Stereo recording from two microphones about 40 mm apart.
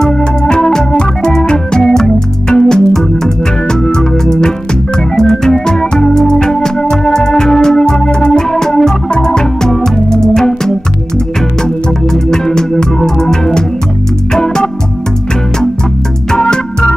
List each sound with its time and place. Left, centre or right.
0.0 s organ: centre
2.1 s music: centre
3.8 s organ: centre
9.1 s music: centre
16.3 s organ: centre